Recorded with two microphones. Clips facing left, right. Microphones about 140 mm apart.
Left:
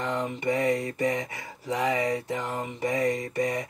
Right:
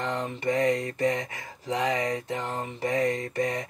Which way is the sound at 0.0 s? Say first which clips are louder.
Left 1 dB; 10° left (ahead or behind).